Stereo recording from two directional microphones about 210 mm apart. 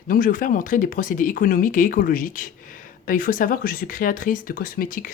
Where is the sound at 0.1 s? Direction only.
40° left (ahead or behind).